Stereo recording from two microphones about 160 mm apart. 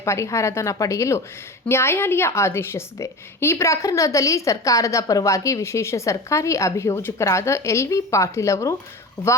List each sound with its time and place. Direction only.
0.0 s a woman's voice: 20° left (ahead or behind)